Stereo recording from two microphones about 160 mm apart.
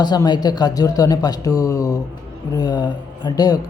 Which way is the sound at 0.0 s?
25° left (ahead or behind).